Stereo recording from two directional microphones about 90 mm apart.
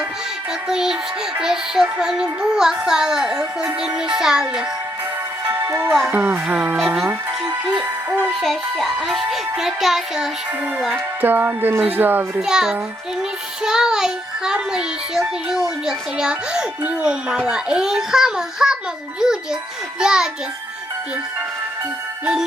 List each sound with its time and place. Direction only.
0.7 s a child's voice: 5° right (ahead or behind)
1.4 s child singing: 5° right (ahead or behind)
5.5 s music: 25° right (ahead or behind)
6.1 s child singing: 20° right (ahead or behind)
6.7 s music: 20° right (ahead or behind)
8.4 s a child's voice: centre (ahead or behind)
10.9 s music: 20° right (ahead or behind)
12.4 s child singing: 5° right (ahead or behind)
22.2 s child singing: 10° right (ahead or behind)